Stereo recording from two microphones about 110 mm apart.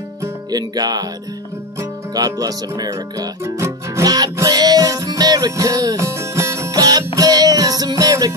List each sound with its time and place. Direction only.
0.5 s music: 35° right (ahead or behind)
2.1 s music: 35° right (ahead or behind)